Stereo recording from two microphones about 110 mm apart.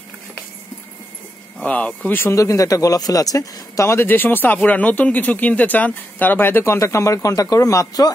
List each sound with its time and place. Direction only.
1.6 s speech: 10° left (ahead or behind)
2.3 s speech: 30° left (ahead or behind)